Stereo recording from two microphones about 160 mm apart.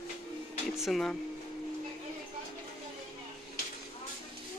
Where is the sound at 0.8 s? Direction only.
Centre (ahead or behind).